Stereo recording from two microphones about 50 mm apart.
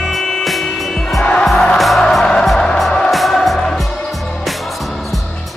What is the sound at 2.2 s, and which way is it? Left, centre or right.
Music, centre.